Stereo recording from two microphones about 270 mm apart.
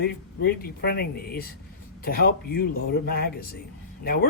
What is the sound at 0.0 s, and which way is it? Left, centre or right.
A man's voice, left.